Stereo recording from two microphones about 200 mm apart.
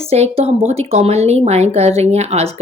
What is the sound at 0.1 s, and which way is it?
A woman's voice, 30° right (ahead or behind).